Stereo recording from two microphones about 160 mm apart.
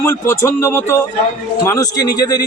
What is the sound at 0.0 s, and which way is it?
A man's voice, 15° left (ahead or behind).